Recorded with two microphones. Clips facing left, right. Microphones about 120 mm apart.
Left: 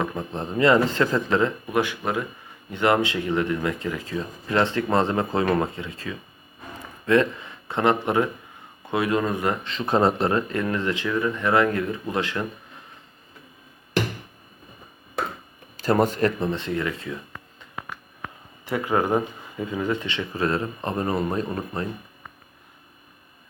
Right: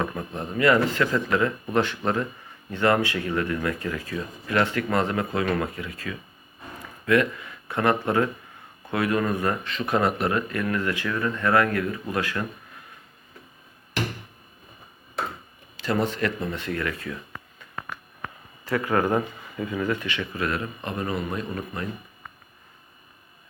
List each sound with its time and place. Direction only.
0.2 s speech: 30° left (ahead or behind)
1.7 s speech: 10° left (ahead or behind)
15.8 s speech: 45° left (ahead or behind); by 17.2 s 20° left (ahead or behind)
18.6 s speech: 20° left (ahead or behind); by 21.8 s 35° left (ahead or behind)